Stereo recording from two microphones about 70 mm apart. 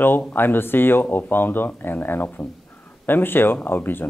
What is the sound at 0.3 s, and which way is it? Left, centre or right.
Speech, left.